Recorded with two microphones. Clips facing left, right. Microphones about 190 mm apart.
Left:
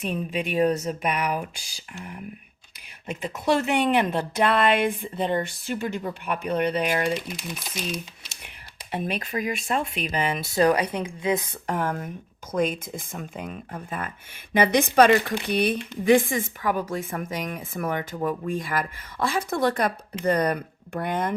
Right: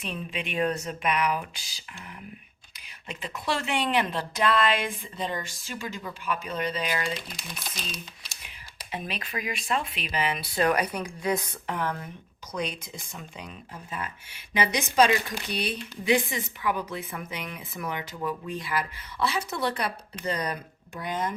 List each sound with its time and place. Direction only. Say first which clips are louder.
0.0 s speech: left 6 dB; 45° left (ahead or behind)
3.1 s speech: left 7 dB; 45° left (ahead or behind)
4.4 s a woman's voice: left 3 dB; 55° left (ahead or behind)
7.5 s speech: left 6 dB; 10° left (ahead or behind)
7.9 s speech: left 7 dB; 55° left (ahead or behind); by 11.3 s 25° left (ahead or behind)
11.6 s a woman's voice: left 4 dB; 45° left (ahead or behind)